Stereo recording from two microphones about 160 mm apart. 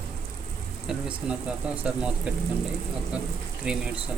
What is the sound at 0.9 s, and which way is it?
Speech, 5° right (ahead or behind).